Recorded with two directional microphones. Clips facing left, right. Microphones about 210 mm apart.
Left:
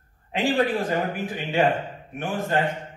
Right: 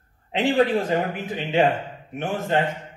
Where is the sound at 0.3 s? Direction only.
20° right (ahead or behind).